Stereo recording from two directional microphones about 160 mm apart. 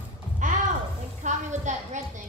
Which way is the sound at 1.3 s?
50° right (ahead or behind).